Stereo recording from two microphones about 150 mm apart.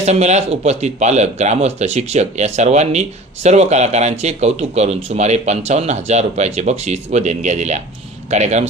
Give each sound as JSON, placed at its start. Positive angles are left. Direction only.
{"t": 0.0, "sound": "speech", "side_deg": -45}